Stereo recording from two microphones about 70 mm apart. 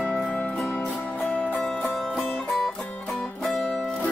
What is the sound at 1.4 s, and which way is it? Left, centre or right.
Music, centre.